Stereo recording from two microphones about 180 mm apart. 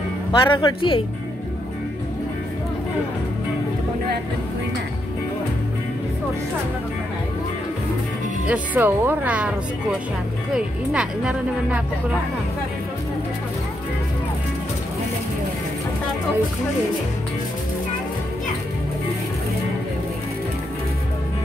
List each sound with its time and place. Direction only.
0.3 s speech: 25° left (ahead or behind)
8.5 s speech: 10° right (ahead or behind)